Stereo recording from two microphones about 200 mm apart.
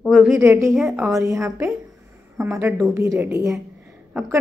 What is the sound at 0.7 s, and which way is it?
Speech, 5° right (ahead or behind).